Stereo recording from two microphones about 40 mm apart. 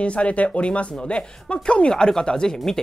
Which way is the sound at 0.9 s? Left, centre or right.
Centre.